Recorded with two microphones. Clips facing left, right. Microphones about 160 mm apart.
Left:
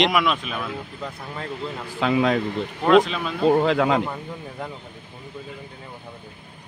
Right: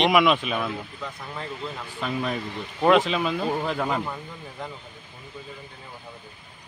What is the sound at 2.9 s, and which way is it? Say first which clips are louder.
Speech: left 2 dB; centre (ahead or behind).